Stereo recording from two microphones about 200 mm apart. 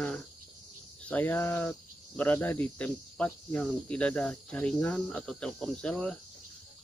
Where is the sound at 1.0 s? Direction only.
10° left (ahead or behind).